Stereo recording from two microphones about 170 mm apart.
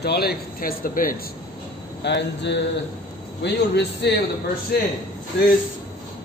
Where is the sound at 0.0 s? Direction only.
65° left (ahead or behind).